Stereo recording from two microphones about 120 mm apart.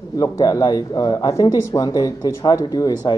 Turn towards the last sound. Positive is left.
turn(degrees=35)  # may be behind; listen again after turning